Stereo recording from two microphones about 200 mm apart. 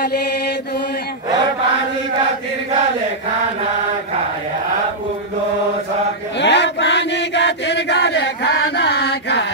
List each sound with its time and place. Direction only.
6.4 s chant: 60° left (ahead or behind)